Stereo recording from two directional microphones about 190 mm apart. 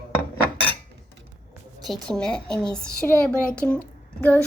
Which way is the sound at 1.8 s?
5° left (ahead or behind).